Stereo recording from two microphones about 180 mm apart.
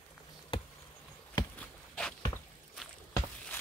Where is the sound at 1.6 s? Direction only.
5° left (ahead or behind).